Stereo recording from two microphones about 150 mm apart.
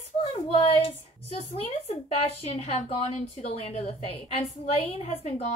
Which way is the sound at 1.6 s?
45° left (ahead or behind).